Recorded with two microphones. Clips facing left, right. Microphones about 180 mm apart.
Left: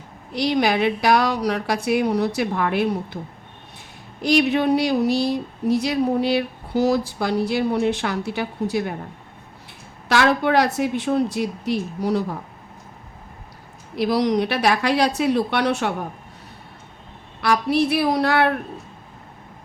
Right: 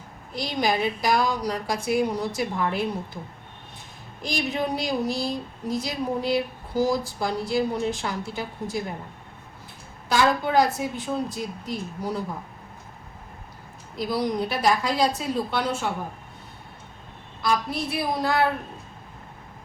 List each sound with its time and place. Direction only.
0.3 s speech: 75° left (ahead or behind)
4.2 s speech: 70° left (ahead or behind)
10.1 s speech: 75° left (ahead or behind)
13.9 s speech: 75° left (ahead or behind)
17.4 s speech: 75° left (ahead or behind)